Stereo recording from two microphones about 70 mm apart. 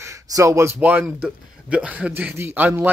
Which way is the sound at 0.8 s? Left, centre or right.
Right.